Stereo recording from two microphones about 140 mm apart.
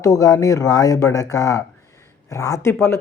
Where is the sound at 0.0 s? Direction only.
25° left (ahead or behind).